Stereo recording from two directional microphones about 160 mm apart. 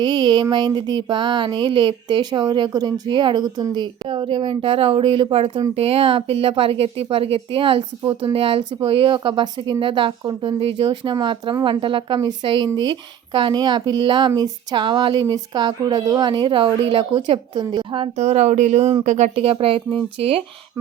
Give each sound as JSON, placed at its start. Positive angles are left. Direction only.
{"t": 0.0, "sound": "speech", "side_deg": -25}